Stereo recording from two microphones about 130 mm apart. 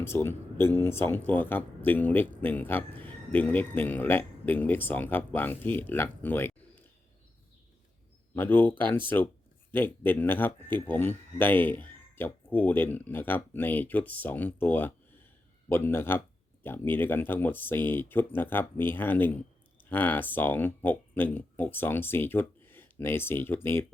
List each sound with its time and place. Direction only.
0.0 s speech: 20° left (ahead or behind)
8.4 s speech: 15° left (ahead or behind)